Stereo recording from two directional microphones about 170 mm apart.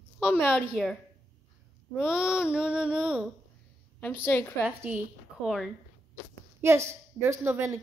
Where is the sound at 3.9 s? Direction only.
10° left (ahead or behind).